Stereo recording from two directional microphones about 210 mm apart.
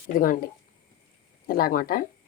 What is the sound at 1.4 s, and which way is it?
Speech, 45° left (ahead or behind).